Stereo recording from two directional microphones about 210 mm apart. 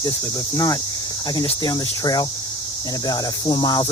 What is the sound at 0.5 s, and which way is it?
Cricket, 20° left (ahead or behind).